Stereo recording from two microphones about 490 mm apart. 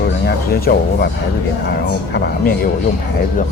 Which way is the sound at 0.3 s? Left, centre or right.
Centre.